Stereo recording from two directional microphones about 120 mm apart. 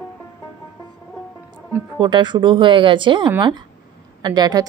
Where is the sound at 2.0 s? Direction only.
40° right (ahead or behind).